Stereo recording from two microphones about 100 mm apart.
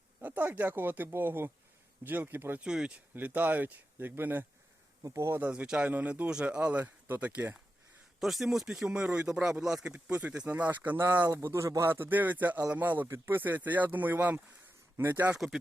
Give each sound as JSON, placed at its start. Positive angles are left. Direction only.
{"t": 0.2, "sound": "speech", "side_deg": -15}
{"t": 2.6, "sound": "speech", "side_deg": -10}
{"t": 5.4, "sound": "speech", "side_deg": -10}
{"t": 8.2, "sound": "speech", "side_deg": 0}